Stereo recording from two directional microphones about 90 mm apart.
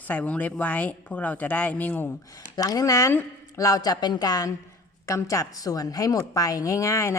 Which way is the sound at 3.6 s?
45° left (ahead or behind).